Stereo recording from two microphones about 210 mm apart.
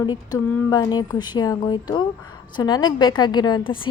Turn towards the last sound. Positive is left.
turn(degrees=20)  # may be behind; listen again after turning